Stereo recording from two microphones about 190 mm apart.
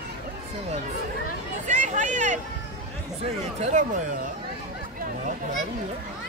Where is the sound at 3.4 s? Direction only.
35° right (ahead or behind).